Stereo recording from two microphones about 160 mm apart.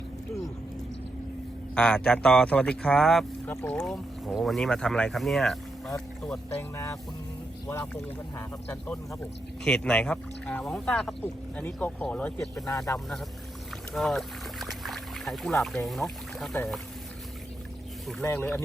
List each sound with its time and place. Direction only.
1.7 s speech: 5° left (ahead or behind)
3.5 s speech: 15° left (ahead or behind)
3.8 s speech: 5° left (ahead or behind)
6.6 s speech: 20° left (ahead or behind)
8.4 s speech: 15° left (ahead or behind)
18.2 s speech: 10° left (ahead or behind)